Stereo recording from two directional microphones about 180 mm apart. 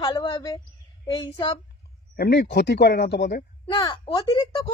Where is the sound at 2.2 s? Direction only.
70° left (ahead or behind).